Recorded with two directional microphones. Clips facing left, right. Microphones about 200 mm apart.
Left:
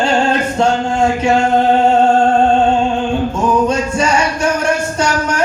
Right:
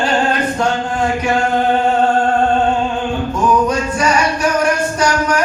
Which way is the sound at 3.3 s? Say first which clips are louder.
Right 2 dB; 25° left (ahead or behind).